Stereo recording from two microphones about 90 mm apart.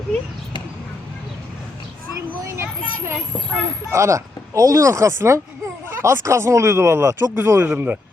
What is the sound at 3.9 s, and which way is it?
Speech, 30° right (ahead or behind).